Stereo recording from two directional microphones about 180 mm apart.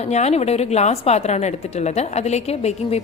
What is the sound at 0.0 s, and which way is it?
A woman's voice, 35° left (ahead or behind).